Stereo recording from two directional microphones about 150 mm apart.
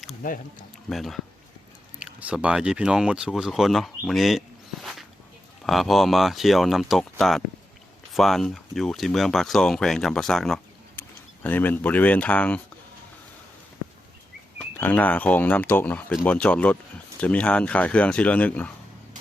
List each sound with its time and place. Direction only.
0.2 s speech: 65° left (ahead or behind)
0.9 s speech: centre (ahead or behind)
14.8 s speech: 10° left (ahead or behind)